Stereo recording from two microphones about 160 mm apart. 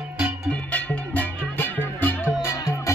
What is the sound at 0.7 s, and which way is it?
Music, 10° left (ahead or behind).